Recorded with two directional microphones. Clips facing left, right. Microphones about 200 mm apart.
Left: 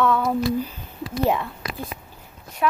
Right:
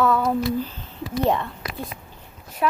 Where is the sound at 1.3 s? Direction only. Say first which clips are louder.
Even; centre (ahead or behind).